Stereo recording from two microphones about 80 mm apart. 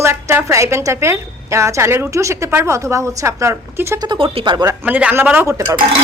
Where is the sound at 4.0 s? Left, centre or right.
Right.